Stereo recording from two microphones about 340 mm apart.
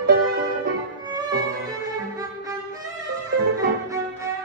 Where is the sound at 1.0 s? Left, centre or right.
Centre.